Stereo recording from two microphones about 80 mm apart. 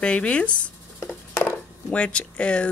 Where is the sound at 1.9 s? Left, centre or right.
Centre.